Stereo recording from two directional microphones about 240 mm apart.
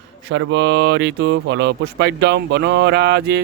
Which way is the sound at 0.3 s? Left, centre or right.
Right.